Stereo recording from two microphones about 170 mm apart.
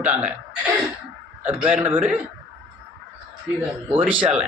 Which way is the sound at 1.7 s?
10° right (ahead or behind).